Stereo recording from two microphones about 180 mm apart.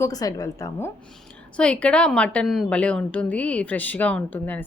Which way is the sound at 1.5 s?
5° left (ahead or behind).